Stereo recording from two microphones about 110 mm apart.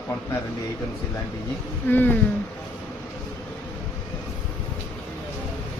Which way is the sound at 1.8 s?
15° left (ahead or behind).